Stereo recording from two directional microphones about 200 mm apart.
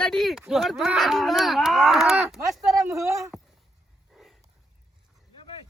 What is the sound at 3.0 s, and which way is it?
Speech, 15° right (ahead or behind).